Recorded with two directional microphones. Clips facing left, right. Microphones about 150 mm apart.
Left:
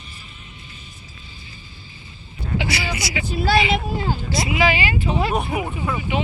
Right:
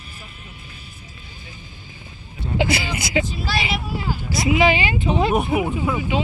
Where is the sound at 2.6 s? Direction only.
50° right (ahead or behind).